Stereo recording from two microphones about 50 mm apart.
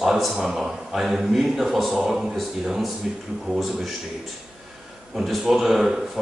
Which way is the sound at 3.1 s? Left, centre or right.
Right.